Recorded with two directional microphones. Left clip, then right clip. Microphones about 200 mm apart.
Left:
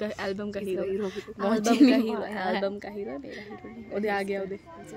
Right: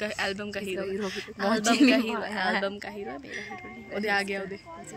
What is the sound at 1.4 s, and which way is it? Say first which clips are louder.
Speech: left 1 dB; 5° left (ahead or behind).